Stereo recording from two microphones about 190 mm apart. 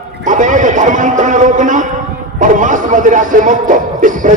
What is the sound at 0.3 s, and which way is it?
A man's voice, 40° right (ahead or behind).